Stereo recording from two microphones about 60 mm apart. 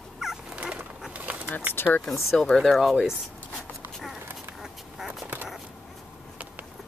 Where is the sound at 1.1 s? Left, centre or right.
Right.